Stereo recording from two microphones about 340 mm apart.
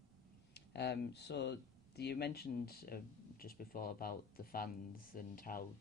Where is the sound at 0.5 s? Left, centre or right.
Left.